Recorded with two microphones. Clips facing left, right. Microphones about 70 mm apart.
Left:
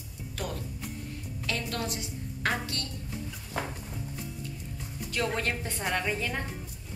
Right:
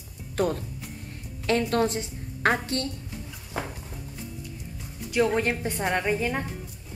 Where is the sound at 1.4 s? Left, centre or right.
Right.